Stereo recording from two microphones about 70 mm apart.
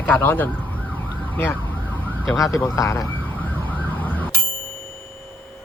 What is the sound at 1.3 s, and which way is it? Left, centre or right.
Emergency vehicle, left.